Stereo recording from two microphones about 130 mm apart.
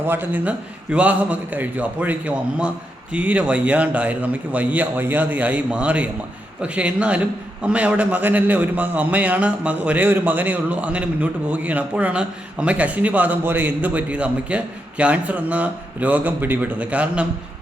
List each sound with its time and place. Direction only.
0.0 s a man's voice: 15° right (ahead or behind)